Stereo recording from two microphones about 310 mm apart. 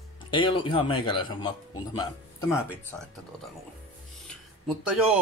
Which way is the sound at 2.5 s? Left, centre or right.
Centre.